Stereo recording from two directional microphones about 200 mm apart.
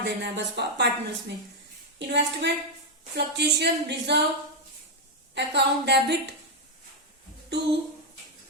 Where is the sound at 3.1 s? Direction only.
55° right (ahead or behind).